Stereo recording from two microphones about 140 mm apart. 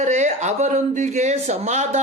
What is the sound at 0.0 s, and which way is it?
Speech, 55° right (ahead or behind).